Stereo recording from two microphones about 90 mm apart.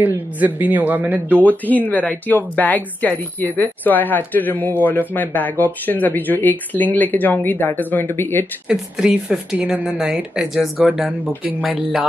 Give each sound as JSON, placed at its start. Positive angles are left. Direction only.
{"t": 0.0, "sound": "a man's voice", "side_deg": -20}
{"t": 1.7, "sound": "speech", "side_deg": 20}
{"t": 8.6, "sound": "speech", "side_deg": -10}